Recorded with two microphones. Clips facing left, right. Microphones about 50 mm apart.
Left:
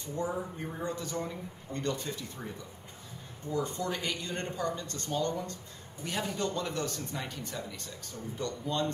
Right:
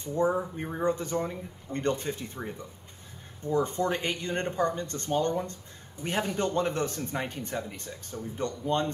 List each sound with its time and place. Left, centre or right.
0.0 s speech: right